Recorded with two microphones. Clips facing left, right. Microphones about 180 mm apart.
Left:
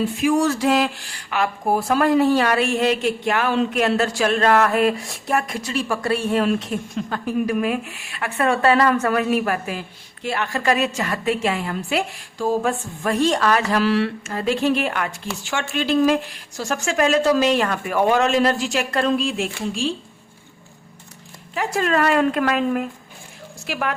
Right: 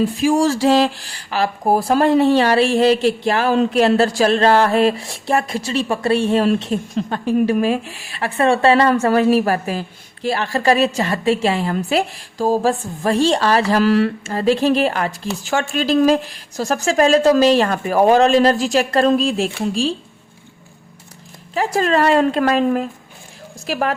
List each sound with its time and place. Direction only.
0.2 s speech: 30° right (ahead or behind)
21.5 s a woman's voice: 35° right (ahead or behind)